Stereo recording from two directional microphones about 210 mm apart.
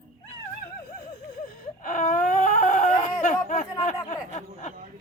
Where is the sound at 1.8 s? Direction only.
40° left (ahead or behind).